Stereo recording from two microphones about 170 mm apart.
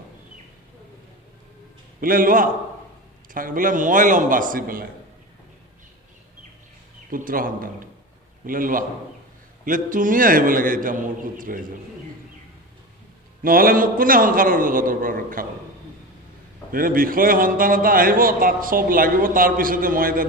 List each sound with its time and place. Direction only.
2.0 s a man's voice: 55° right (ahead or behind)
7.1 s a man's voice: 55° right (ahead or behind)
13.4 s a man's voice: 55° right (ahead or behind)
16.7 s a man's voice: 55° right (ahead or behind)